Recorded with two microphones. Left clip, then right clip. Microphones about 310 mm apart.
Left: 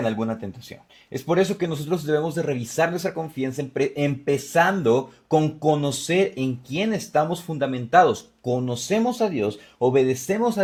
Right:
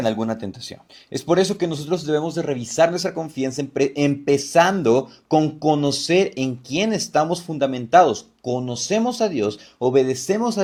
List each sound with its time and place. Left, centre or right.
0.0 s speech: left